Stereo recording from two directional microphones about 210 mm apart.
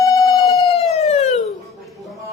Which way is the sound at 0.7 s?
30° left (ahead or behind).